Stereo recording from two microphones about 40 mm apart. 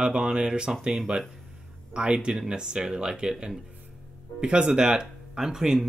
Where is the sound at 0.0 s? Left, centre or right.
Right.